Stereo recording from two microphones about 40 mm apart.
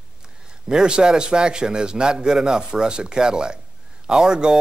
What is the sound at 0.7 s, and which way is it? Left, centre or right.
Speech, right.